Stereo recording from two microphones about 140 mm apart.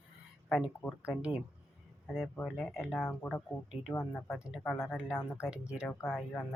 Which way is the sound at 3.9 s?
15° left (ahead or behind).